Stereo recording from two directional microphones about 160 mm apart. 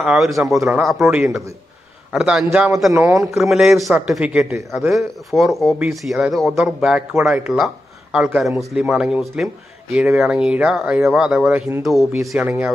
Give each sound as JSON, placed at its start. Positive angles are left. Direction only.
{"t": 0.0, "sound": "speech", "side_deg": -5}
{"t": 0.6, "sound": "speech", "side_deg": -15}
{"t": 1.1, "sound": "speech", "side_deg": 0}
{"t": 2.9, "sound": "speech", "side_deg": -20}
{"t": 3.3, "sound": "speech", "side_deg": 0}
{"t": 12.2, "sound": "speech", "side_deg": -15}